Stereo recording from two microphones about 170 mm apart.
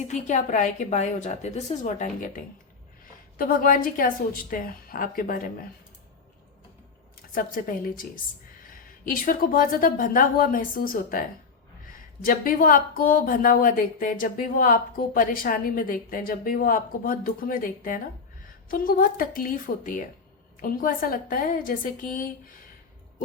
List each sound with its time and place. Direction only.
0.1 s a woman's voice: 45° left (ahead or behind)
7.2 s speech: 55° left (ahead or behind)
12.2 s speech: 55° left (ahead or behind)